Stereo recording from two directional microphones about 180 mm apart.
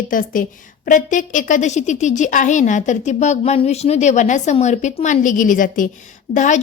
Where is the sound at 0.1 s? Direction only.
50° left (ahead or behind).